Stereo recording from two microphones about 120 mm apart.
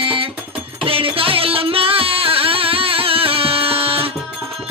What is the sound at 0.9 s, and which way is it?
Music, 50° right (ahead or behind).